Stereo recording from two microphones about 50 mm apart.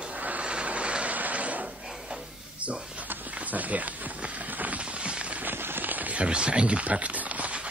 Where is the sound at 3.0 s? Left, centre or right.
Right.